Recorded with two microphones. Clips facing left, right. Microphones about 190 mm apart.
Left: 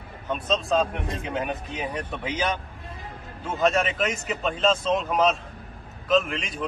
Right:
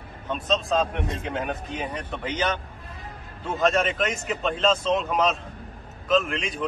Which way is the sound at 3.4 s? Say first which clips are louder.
Even; centre (ahead or behind).